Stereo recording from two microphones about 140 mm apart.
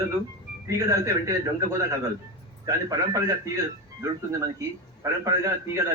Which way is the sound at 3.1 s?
20° right (ahead or behind).